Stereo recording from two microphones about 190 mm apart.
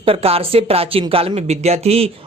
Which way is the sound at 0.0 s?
30° right (ahead or behind).